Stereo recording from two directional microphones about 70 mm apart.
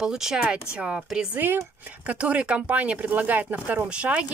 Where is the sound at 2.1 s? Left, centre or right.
Centre.